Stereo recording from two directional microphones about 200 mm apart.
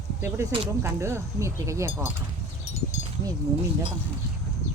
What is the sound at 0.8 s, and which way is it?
Speech, 15° right (ahead or behind).